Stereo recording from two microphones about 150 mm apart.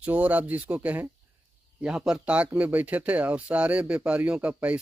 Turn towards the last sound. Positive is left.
turn(degrees=-10)  # may be behind; listen again after turning